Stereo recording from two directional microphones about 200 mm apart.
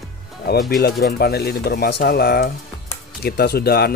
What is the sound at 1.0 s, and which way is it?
Speech, 55° left (ahead or behind).